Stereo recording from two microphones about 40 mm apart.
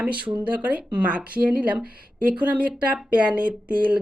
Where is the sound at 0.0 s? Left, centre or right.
Right.